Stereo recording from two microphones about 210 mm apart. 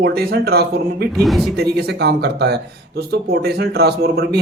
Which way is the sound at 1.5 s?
50° right (ahead or behind).